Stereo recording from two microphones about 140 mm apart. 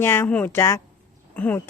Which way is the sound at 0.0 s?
15° left (ahead or behind).